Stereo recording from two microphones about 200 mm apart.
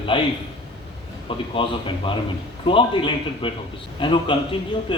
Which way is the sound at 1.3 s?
25° left (ahead or behind).